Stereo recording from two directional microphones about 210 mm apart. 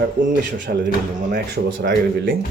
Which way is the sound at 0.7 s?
45° right (ahead or behind).